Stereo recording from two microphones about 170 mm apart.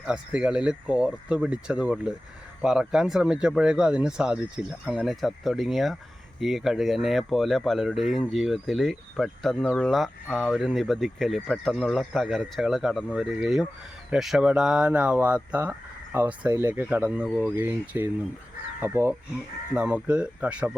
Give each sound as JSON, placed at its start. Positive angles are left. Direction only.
{"t": 0.0, "sound": "speech", "side_deg": -5}